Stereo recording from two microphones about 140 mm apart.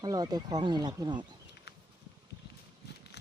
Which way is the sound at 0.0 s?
30° right (ahead or behind).